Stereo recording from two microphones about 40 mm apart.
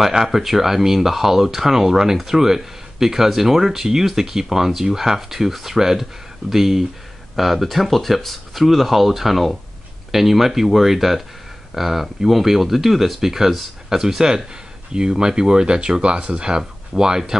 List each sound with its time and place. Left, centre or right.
0.0 s speech: centre